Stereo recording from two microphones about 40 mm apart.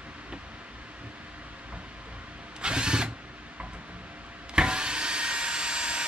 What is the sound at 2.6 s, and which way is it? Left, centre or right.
Vehicle, right.